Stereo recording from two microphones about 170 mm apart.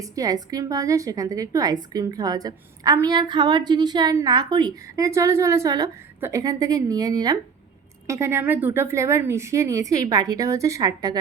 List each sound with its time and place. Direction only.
0.0 s a woman's voice: 20° right (ahead or behind)